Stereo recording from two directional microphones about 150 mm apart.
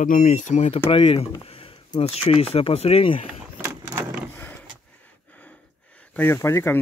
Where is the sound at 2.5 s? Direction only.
40° left (ahead or behind).